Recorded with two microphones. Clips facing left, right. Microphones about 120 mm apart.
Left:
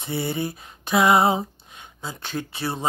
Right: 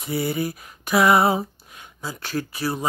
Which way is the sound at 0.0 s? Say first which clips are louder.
Right 2 dB; 30° left (ahead or behind).